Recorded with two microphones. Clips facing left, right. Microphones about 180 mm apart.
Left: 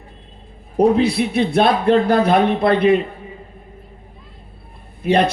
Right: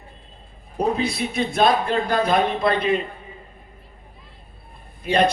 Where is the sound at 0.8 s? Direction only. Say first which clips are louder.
Left 8 dB; 65° left (ahead or behind).